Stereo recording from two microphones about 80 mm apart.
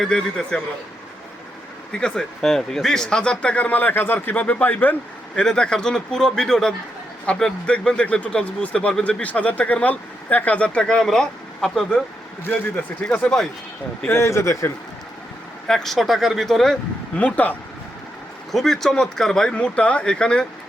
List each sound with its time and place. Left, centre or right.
0.0 s speech: centre
1.9 s speech: centre
5.4 s speech: centre
9.2 s speech: centre
12.5 s speech: centre
14.1 s speech: left
15.6 s speech: centre
17.2 s speech: centre
18.5 s speech: centre